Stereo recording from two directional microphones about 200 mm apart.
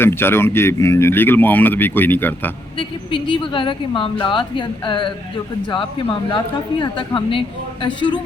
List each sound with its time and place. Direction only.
0.0 s speech: 10° left (ahead or behind)
2.7 s a woman's voice: 25° left (ahead or behind)
6.3 s a woman's voice: 20° left (ahead or behind)